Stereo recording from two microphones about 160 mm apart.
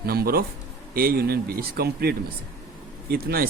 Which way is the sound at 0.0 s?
75° right (ahead or behind).